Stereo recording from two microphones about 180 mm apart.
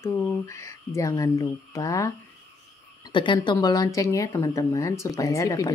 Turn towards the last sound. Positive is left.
turn(degrees=20)  # may be behind; listen again after turning